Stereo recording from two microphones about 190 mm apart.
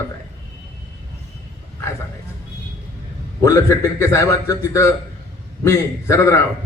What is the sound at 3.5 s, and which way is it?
A man's voice, 15° left (ahead or behind).